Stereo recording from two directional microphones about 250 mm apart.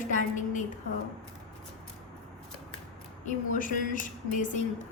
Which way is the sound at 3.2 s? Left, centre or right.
Left.